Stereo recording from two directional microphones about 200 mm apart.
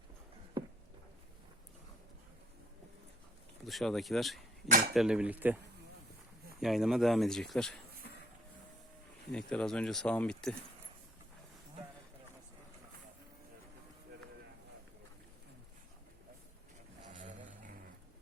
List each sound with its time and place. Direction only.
3.7 s speech: centre (ahead or behind)
4.9 s cutlery: 5° right (ahead or behind)
6.6 s speech: centre (ahead or behind)
9.3 s speech: 5° left (ahead or behind)
17.2 s a sound: 40° right (ahead or behind)